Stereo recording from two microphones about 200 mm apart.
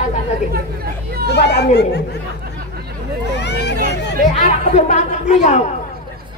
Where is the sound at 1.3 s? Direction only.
55° left (ahead or behind).